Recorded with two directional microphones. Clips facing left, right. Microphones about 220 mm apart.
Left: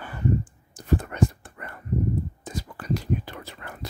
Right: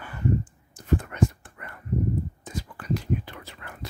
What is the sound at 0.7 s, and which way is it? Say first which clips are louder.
Whispering: left 1 dB; 35° left (ahead or behind).